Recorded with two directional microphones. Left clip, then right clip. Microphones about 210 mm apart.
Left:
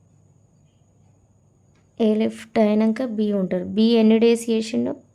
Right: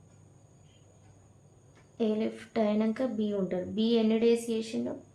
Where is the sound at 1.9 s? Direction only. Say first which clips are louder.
Left 10 dB; 50° left (ahead or behind).